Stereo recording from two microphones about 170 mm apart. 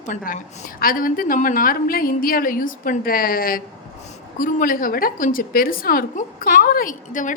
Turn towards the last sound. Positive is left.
turn(degrees=50)  # may be behind; listen again after turning